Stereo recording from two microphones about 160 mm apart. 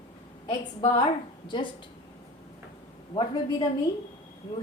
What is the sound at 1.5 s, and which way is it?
Speech, 30° left (ahead or behind).